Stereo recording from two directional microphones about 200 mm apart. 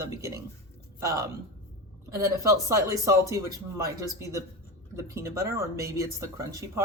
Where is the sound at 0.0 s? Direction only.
15° right (ahead or behind).